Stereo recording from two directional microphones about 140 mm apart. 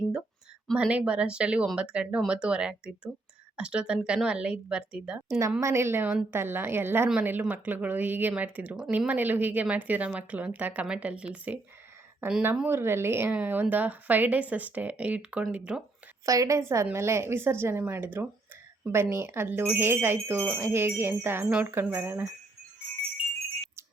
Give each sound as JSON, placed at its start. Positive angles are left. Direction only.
{"t": 0.8, "sound": "speech", "side_deg": -10}
{"t": 5.4, "sound": "speech", "side_deg": -20}
{"t": 16.2, "sound": "speech", "side_deg": -25}